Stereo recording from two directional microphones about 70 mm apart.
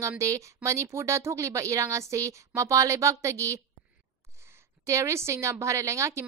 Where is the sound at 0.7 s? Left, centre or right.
Right.